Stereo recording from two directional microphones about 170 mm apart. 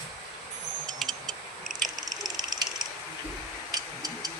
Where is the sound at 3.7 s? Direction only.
20° right (ahead or behind).